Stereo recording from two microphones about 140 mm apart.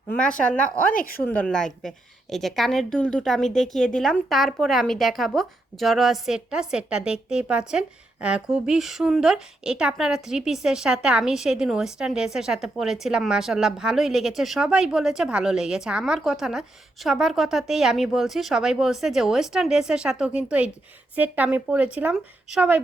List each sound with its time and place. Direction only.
0.2 s speech: 10° left (ahead or behind)
0.9 s speech: 90° left
1.2 s a woman's voice: 10° left (ahead or behind); by 22.8 s 5° right (ahead or behind)